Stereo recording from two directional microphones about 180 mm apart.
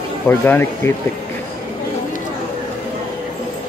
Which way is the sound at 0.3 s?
10° left (ahead or behind).